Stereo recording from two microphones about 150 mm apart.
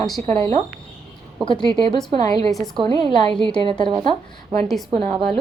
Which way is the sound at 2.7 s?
35° right (ahead or behind).